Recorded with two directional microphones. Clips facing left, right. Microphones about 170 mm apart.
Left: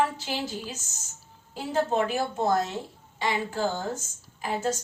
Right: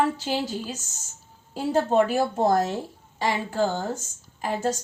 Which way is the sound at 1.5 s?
40° right (ahead or behind).